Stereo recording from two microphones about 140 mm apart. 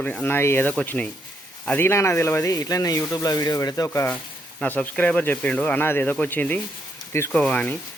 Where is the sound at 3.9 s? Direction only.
15° left (ahead or behind).